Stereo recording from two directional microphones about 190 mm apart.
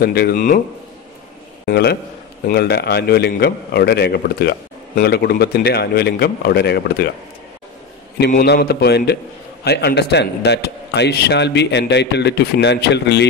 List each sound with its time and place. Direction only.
0.0 s speech: 55° left (ahead or behind)
1.7 s a man's voice: 60° left (ahead or behind)
8.3 s a man's voice: 45° left (ahead or behind); by 13.3 s 65° left (ahead or behind)